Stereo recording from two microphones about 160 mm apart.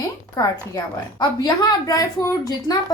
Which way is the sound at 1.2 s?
25° left (ahead or behind).